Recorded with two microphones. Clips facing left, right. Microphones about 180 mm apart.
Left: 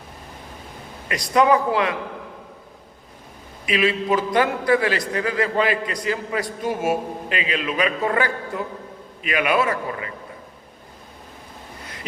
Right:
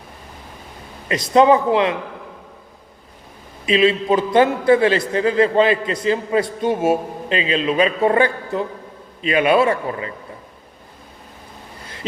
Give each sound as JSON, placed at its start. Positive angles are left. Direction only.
{"t": 1.0, "sound": "a man's voice", "side_deg": -25}
{"t": 3.7, "sound": "a man's voice", "side_deg": -25}